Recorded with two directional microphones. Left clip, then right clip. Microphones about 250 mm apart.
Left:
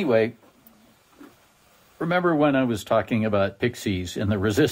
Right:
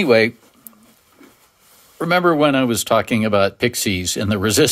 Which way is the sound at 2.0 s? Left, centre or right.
Right.